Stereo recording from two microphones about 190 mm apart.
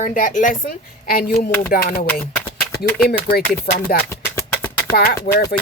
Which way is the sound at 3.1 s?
55° left (ahead or behind).